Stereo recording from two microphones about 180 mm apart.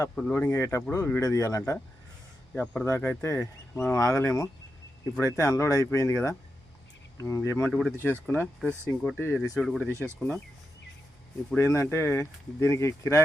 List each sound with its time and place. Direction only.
0.2 s speech: 10° left (ahead or behind)
7.7 s speech: centre (ahead or behind)
8.0 s speech: 10° left (ahead or behind)
9.6 s speech: centre (ahead or behind)
9.9 s speech: 15° right (ahead or behind)
11.5 s speech: 15° left (ahead or behind)